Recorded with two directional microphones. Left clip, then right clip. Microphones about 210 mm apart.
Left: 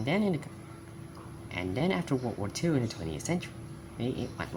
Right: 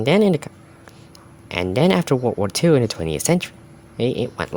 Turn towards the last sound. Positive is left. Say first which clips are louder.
# right 13 dB
turn(degrees=-50)  # may be behind; listen again after turning